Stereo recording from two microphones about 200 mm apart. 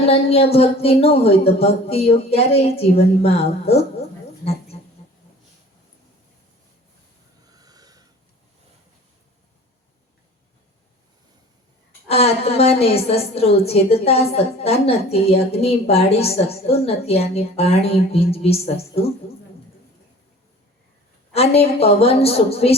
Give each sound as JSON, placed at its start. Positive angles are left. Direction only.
{"t": 0.0, "sound": "speech", "side_deg": 30}
{"t": 7.5, "sound": "snort", "side_deg": -20}
{"t": 12.0, "sound": "a woman's voice", "side_deg": 30}
{"t": 21.3, "sound": "a woman's voice", "side_deg": 30}